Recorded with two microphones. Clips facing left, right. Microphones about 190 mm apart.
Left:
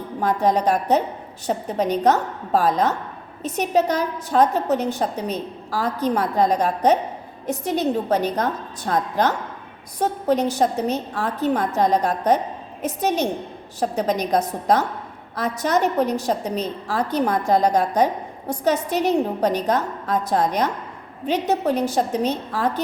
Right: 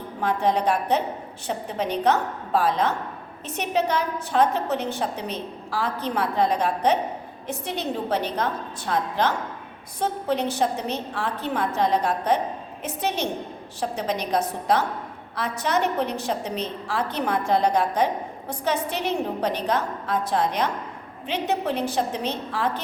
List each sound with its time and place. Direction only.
0.2 s a woman's voice: 40° left (ahead or behind)